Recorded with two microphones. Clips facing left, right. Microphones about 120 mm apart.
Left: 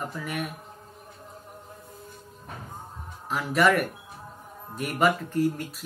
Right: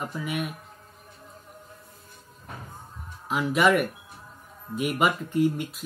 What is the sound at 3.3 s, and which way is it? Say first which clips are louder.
Speech: right 1 dB; 10° right (ahead or behind).